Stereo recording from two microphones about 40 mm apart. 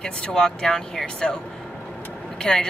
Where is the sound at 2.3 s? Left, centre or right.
Centre.